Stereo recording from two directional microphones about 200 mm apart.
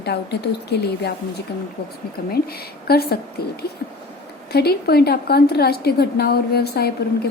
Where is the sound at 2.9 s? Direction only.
50° left (ahead or behind).